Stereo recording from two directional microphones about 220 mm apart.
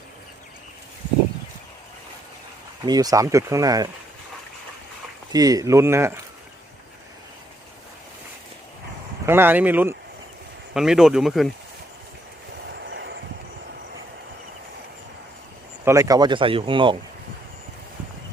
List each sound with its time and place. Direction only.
2.8 s speech: 15° right (ahead or behind)
5.3 s speech: 15° right (ahead or behind)
9.2 s speech: 10° right (ahead or behind)
12.9 s vehicle: 50° right (ahead or behind)
15.8 s speech: 15° right (ahead or behind)